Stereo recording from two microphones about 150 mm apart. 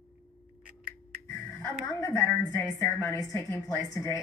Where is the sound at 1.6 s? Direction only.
20° left (ahead or behind).